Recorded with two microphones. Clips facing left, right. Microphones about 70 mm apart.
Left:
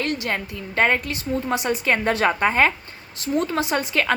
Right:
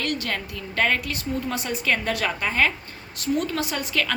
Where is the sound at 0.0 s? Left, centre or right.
Left.